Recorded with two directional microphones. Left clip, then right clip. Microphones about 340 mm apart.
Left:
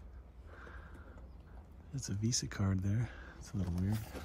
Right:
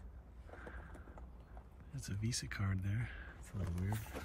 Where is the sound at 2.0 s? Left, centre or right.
Centre.